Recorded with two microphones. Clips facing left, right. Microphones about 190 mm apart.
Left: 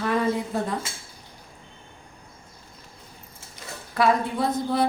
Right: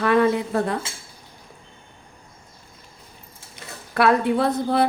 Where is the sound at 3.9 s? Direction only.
65° right (ahead or behind).